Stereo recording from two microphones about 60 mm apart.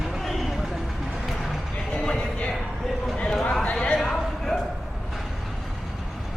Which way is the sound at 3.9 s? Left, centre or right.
Centre.